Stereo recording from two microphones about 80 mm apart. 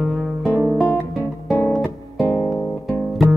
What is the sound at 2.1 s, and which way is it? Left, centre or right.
Music, left.